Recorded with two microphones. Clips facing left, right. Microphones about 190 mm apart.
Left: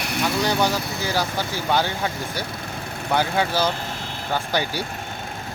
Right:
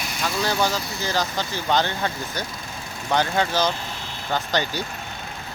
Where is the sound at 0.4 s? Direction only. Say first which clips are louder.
Left 2 dB; 15° left (ahead or behind).